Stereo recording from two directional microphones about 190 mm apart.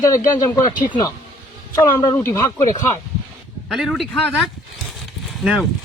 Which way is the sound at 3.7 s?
Centre (ahead or behind).